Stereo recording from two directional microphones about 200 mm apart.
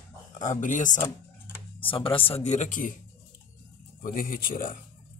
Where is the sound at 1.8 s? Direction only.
25° left (ahead or behind).